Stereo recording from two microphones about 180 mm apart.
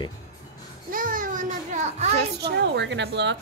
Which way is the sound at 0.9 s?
50° right (ahead or behind).